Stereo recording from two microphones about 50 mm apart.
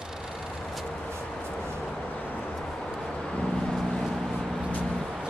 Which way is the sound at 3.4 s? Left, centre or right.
Centre.